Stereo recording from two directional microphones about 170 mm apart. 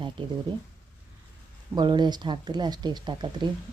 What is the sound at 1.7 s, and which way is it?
Speech, 25° right (ahead or behind).